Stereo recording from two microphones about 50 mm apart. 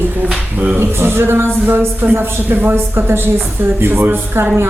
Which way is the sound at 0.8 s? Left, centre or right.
Right.